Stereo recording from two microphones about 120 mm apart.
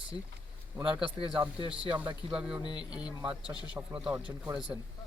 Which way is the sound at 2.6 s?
40° left (ahead or behind).